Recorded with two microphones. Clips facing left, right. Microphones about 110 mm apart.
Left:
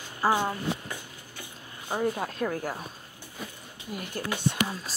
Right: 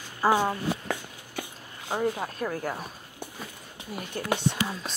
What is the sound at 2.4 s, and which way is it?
Speech, 35° right (ahead or behind).